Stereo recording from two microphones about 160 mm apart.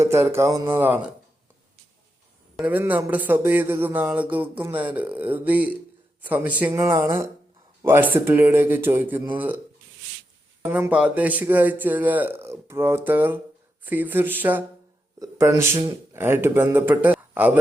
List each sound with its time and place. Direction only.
0.0 s speech: 15° right (ahead or behind)
2.6 s speech: 10° right (ahead or behind)
10.6 s speech: 10° right (ahead or behind)